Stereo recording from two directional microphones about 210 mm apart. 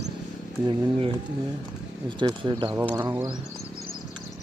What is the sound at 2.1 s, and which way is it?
Speech, 20° right (ahead or behind).